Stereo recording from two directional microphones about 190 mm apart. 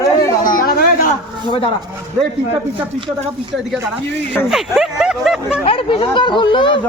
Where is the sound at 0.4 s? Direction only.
45° left (ahead or behind).